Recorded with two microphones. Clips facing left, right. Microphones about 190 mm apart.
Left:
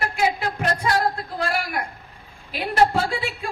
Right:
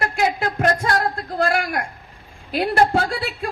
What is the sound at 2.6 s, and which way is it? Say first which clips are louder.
Speech: right 2 dB; 45° right (ahead or behind).